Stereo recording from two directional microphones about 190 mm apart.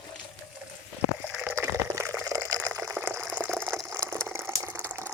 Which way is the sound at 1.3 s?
5° right (ahead or behind).